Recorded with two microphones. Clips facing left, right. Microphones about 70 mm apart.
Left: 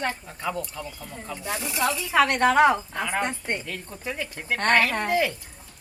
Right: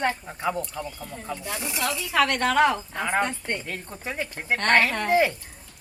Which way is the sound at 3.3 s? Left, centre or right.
Left.